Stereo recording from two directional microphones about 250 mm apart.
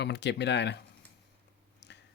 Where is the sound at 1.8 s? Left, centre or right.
Left.